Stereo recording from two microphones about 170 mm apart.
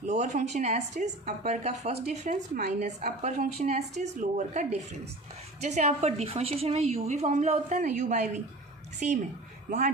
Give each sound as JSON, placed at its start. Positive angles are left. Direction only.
{"t": 0.0, "sound": "a woman's voice", "side_deg": -45}
{"t": 9.6, "sound": "speech", "side_deg": -50}